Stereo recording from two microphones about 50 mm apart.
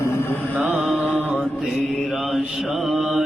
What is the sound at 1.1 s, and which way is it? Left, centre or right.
Mantra, right.